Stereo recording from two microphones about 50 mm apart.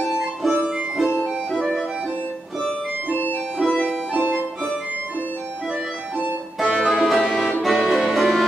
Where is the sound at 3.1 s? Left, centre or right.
Left.